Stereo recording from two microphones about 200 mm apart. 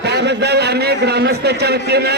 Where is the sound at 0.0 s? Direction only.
55° right (ahead or behind).